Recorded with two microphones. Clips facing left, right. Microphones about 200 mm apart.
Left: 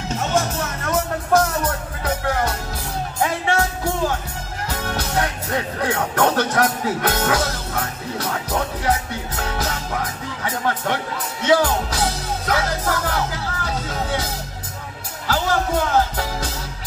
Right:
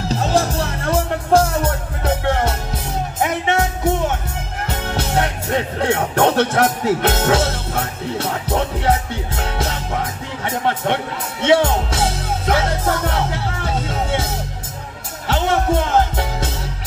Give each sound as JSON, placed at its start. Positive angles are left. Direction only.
{"t": 0.1, "sound": "music", "side_deg": -35}
{"t": 4.6, "sound": "speech", "side_deg": -25}
{"t": 11.4, "sound": "music", "side_deg": -25}